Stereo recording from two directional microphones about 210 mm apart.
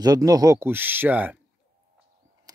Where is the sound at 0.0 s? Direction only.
15° right (ahead or behind).